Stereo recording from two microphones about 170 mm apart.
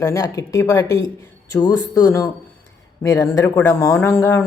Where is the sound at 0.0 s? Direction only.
20° left (ahead or behind).